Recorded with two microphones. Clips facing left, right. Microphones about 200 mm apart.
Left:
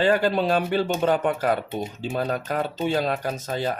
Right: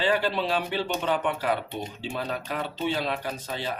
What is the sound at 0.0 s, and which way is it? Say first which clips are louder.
Speech: left 5 dB; 45° left (ahead or behind).